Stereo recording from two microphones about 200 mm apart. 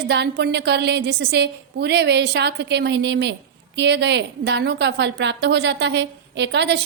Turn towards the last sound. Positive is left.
turn(degrees=-60)  # may be behind; listen again after turning